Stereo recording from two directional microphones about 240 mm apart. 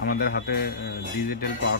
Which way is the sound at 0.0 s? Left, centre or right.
Left.